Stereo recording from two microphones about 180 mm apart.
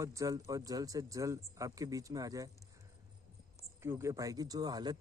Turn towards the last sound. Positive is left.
turn(degrees=-20)  # may be behind; listen again after turning